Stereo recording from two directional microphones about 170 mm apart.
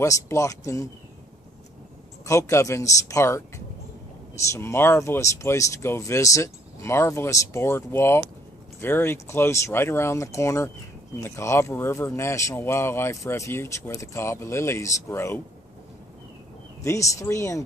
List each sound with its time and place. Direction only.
0.0 s speech: 20° left (ahead or behind)
2.2 s speech: 20° left (ahead or behind)
16.8 s speech: 20° left (ahead or behind)